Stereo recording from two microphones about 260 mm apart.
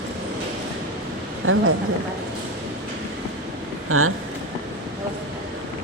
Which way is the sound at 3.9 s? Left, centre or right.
Right.